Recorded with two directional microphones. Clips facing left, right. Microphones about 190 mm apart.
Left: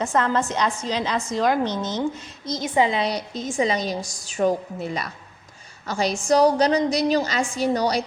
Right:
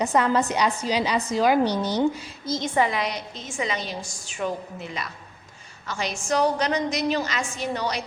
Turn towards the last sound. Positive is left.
turn(degrees=35)  # may be behind; listen again after turning